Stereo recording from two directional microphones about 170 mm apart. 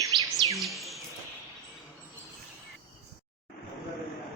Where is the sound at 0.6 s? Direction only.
Centre (ahead or behind).